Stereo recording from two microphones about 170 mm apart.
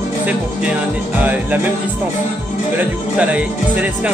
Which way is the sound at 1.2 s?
10° right (ahead or behind).